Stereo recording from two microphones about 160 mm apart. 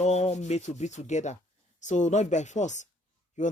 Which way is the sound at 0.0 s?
45° left (ahead or behind).